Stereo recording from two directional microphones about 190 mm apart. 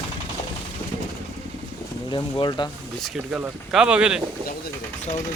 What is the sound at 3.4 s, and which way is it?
Speech, 5° right (ahead or behind).